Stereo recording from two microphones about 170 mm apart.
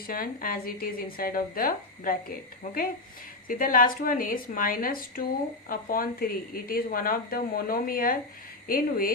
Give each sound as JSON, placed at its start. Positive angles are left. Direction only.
{"t": 0.1, "sound": "speech", "side_deg": 55}
{"t": 3.5, "sound": "speech", "side_deg": 55}